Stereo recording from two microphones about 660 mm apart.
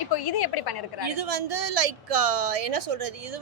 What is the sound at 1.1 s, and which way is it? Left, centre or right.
A woman's voice, right.